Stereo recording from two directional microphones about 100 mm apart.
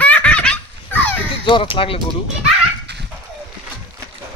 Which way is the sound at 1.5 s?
60° left (ahead or behind).